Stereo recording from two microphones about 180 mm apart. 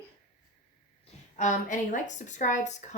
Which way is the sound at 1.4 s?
45° left (ahead or behind).